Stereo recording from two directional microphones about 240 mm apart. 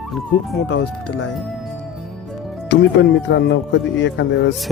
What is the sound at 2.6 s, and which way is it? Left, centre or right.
Speech, left.